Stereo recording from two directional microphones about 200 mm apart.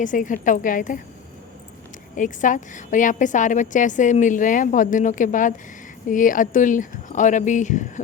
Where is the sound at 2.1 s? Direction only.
40° left (ahead or behind).